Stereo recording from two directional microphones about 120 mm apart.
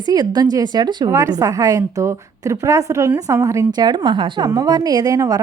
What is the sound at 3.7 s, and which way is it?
A woman's voice, 35° right (ahead or behind).